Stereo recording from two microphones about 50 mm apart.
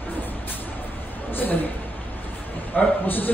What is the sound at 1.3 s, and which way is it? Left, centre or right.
Speech, left.